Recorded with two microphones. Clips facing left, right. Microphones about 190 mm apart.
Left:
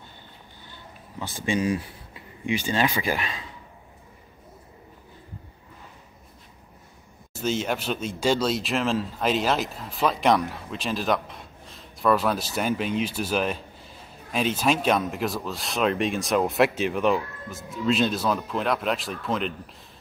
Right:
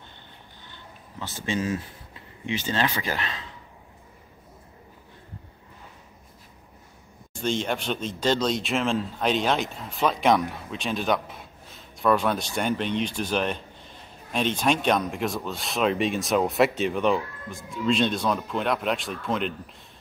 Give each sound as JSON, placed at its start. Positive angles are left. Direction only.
{"t": 1.2, "sound": "speech", "side_deg": 15}
{"t": 7.3, "sound": "speech", "side_deg": 5}